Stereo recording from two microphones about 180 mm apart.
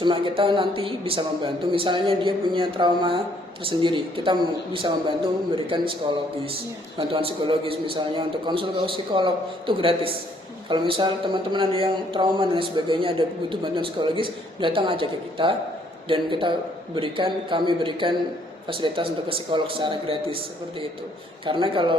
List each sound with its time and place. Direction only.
0.0 s speech: 30° right (ahead or behind)
7.1 s speech: 30° right (ahead or behind)